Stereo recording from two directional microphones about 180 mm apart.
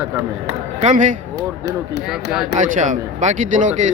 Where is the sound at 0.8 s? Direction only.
45° right (ahead or behind).